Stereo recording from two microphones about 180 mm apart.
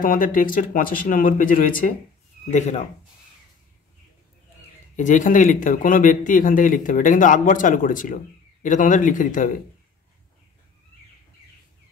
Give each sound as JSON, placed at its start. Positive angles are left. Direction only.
{"t": 0.0, "sound": "speech", "side_deg": 50}
{"t": 4.9, "sound": "speech", "side_deg": 45}